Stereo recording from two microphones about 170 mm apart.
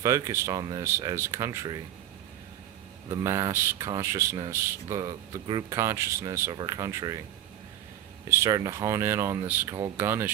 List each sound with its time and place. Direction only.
0.0 s speech: 15° right (ahead or behind)
3.1 s speech: 20° right (ahead or behind)
8.3 s speech: 20° right (ahead or behind)